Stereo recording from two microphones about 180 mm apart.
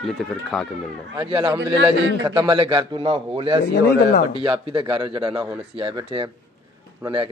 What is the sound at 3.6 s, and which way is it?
Speech, 60° left (ahead or behind).